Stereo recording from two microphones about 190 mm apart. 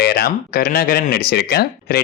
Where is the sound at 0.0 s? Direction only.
55° left (ahead or behind).